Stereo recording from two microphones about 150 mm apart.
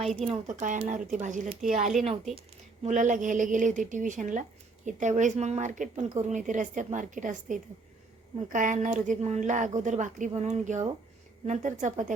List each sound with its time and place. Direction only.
0.3 s a woman's voice: 55° right (ahead or behind)
1.8 s speech: centre (ahead or behind)
2.8 s a woman's voice: 55° right (ahead or behind)